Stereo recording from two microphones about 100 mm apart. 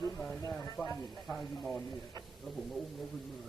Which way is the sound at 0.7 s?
25° left (ahead or behind).